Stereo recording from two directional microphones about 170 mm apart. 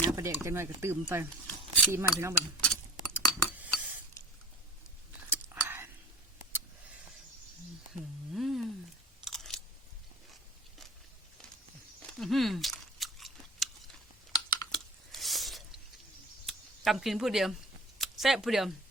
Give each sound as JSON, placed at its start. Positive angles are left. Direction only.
{"t": 0.2, "sound": "speech", "side_deg": -15}
{"t": 1.5, "sound": "a sound", "side_deg": 10}
{"t": 1.9, "sound": "speech", "side_deg": -15}
{"t": 2.6, "sound": "chink", "side_deg": 10}
{"t": 3.6, "sound": "cutlery", "side_deg": -10}
{"t": 5.3, "sound": "a sound", "side_deg": -15}
{"t": 8.3, "sound": "a sound", "side_deg": 0}
{"t": 9.2, "sound": "chewing", "side_deg": 0}
{"t": 12.2, "sound": "speech", "side_deg": 0}
{"t": 13.0, "sound": "chewing", "side_deg": 0}
{"t": 14.7, "sound": "chewing", "side_deg": 0}
{"t": 16.5, "sound": "speech", "side_deg": 0}